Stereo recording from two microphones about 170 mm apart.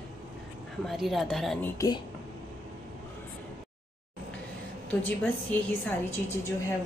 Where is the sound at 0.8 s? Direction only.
Centre (ahead or behind).